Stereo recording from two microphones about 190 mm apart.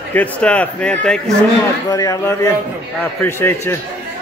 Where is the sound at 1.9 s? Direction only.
15° left (ahead or behind).